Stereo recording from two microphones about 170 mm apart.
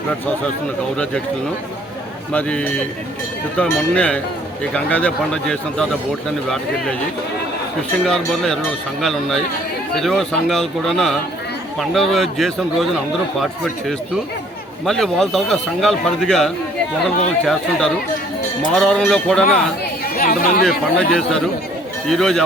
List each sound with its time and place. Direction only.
2.3 s speech: 5° left (ahead or behind)
8.0 s speech: 5° left (ahead or behind)
14.8 s speech: centre (ahead or behind)
19.5 s speech: 55° left (ahead or behind)
20.7 s speech: 5° left (ahead or behind)